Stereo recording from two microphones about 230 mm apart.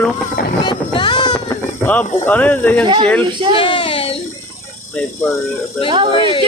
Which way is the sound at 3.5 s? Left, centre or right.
Left.